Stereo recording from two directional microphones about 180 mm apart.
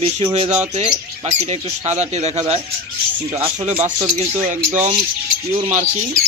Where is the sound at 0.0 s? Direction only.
35° right (ahead or behind).